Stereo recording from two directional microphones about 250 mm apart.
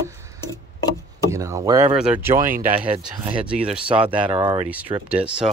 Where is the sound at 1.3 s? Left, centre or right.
Centre.